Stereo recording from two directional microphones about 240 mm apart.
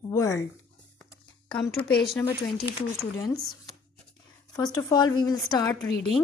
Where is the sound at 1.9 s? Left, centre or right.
Centre.